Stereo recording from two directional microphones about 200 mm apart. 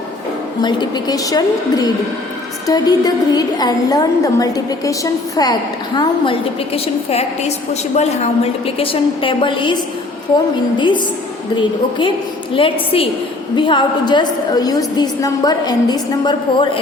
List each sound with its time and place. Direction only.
0.6 s a woman's voice: 20° left (ahead or behind)
10.8 s a woman's voice: 25° left (ahead or behind)